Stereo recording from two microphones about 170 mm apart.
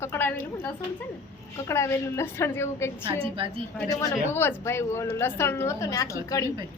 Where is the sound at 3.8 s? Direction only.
20° left (ahead or behind).